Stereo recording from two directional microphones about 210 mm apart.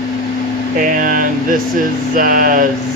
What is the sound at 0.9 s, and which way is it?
Speech, 40° right (ahead or behind).